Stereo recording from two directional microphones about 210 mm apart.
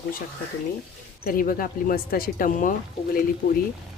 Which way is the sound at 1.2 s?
45° left (ahead or behind).